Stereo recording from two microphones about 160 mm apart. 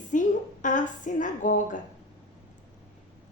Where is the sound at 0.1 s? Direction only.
50° left (ahead or behind).